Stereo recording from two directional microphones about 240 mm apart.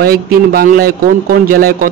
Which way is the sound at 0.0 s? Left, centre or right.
Right.